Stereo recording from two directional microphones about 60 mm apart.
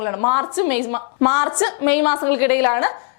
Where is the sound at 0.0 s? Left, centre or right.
Left.